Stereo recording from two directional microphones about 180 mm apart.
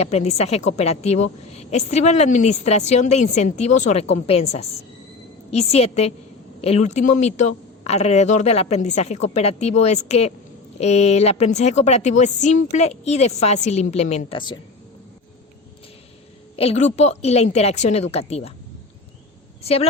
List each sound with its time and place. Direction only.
0.0 s a woman's voice: 35° left (ahead or behind)
16.6 s a woman's voice: 35° left (ahead or behind)
19.6 s a woman's voice: 35° left (ahead or behind)